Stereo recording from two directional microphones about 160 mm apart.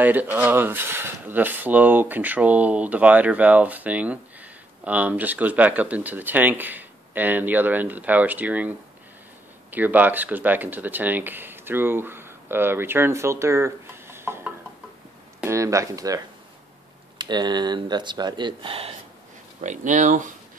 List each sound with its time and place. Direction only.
0.0 s speech: 10° right (ahead or behind)
17.2 s speech: 25° right (ahead or behind)
19.6 s speech: 50° right (ahead or behind)